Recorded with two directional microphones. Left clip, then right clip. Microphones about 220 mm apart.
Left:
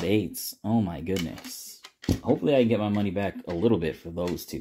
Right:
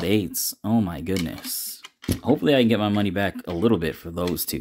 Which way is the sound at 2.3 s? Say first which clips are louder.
Right 3 dB; 30° right (ahead or behind).